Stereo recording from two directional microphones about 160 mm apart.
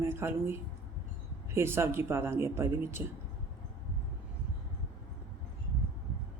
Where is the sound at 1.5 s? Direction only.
15° right (ahead or behind).